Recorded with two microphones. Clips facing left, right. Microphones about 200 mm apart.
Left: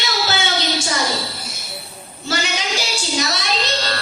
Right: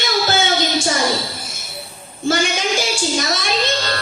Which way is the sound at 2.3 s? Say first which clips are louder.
Right 4 dB; 50° right (ahead or behind).